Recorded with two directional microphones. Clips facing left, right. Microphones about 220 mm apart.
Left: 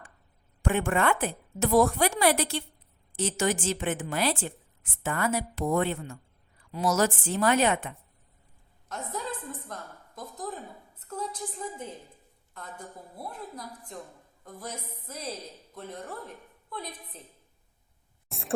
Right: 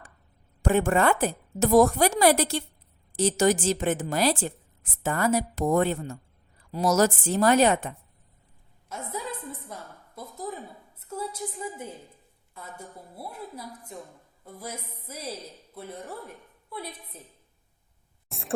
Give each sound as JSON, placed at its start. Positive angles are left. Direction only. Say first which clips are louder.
{"t": 0.6, "sound": "a woman's voice", "louder": "right 4 dB", "side_deg": -40}
{"t": 8.9, "sound": "a woman's voice", "louder": "even", "side_deg": -10}
{"t": 18.3, "sound": "a sound", "louder": "even", "side_deg": 0}